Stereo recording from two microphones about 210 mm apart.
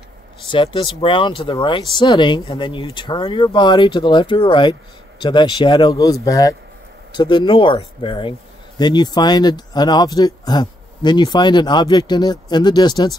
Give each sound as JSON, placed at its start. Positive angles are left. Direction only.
{"t": 0.5, "sound": "speech", "side_deg": 25}